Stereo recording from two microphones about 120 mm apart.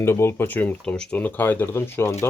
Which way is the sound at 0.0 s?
20° left (ahead or behind).